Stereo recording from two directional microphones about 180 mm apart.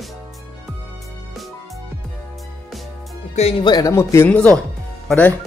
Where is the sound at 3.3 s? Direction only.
35° left (ahead or behind).